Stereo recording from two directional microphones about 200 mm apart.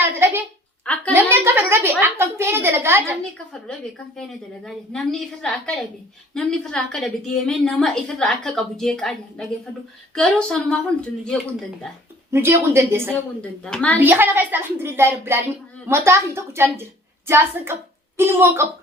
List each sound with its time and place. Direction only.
0.0 s a sound: 10° right (ahead or behind)
2.0 s a woman's voice: 10° right (ahead or behind)
3.3 s a woman's voice: 5° left (ahead or behind)
12.3 s a woman's voice: 10° right (ahead or behind)
13.7 s a woman's voice: 5° left (ahead or behind)
14.0 s a woman's voice: 10° right (ahead or behind)